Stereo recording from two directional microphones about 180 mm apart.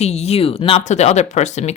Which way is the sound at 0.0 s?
35° left (ahead or behind).